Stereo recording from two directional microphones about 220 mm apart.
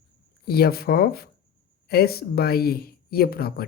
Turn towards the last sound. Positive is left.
turn(degrees=45)  # may be behind; listen again after turning